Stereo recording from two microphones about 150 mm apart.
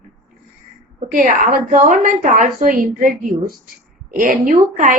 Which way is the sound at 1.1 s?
70° right (ahead or behind).